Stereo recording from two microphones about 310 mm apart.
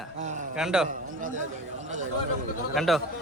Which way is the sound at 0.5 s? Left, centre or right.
Centre.